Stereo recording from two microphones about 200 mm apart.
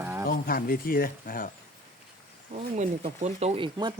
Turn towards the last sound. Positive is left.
turn(degrees=-20)  # may be behind; listen again after turning